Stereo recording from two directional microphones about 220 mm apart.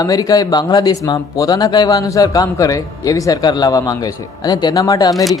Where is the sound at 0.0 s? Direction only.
15° left (ahead or behind).